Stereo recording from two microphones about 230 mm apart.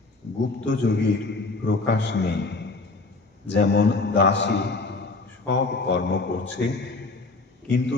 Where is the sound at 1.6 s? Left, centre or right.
Left.